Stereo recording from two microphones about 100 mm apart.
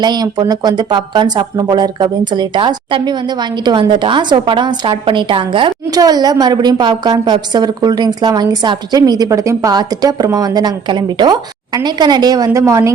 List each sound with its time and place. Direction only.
0.0 s a woman's voice: 45° right (ahead or behind)
5.9 s a woman's voice: 40° right (ahead or behind)
12.5 s a woman's voice: 30° right (ahead or behind)